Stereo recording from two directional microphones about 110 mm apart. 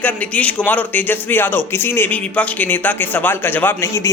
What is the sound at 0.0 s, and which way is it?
A man's voice, 15° left (ahead or behind).